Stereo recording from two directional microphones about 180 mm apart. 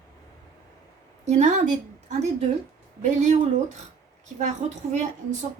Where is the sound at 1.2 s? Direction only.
40° right (ahead or behind).